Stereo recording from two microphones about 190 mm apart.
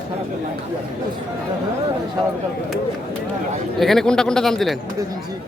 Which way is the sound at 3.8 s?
Centre (ahead or behind).